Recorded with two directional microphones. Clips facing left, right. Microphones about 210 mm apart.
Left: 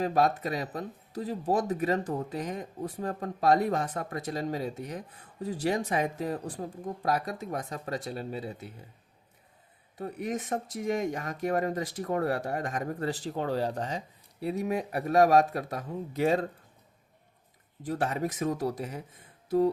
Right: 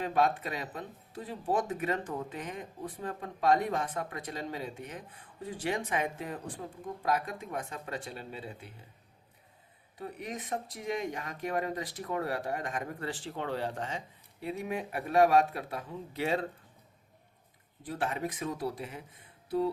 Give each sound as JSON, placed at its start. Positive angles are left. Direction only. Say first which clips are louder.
{"t": 0.0, "sound": "speech", "louder": "left 3 dB", "side_deg": 40}
{"t": 10.0, "sound": "speech", "louder": "left 6 dB", "side_deg": 45}
{"t": 17.8, "sound": "speech", "louder": "left 4 dB", "side_deg": 40}
{"t": 19.5, "sound": "music", "louder": "left 5 dB", "side_deg": 45}